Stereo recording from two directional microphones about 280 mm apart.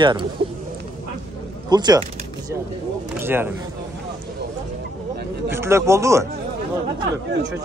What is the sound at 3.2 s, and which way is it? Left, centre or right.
Speech, centre.